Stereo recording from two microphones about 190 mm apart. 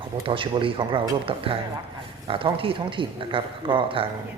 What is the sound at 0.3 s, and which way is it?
Speech, 25° right (ahead or behind).